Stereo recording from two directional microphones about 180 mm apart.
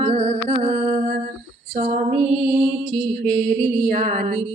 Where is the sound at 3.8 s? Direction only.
45° right (ahead or behind).